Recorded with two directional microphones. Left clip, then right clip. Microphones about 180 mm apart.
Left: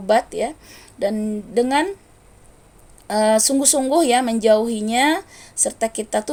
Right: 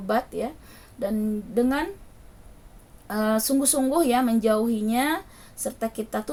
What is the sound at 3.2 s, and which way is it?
Speech, 30° left (ahead or behind).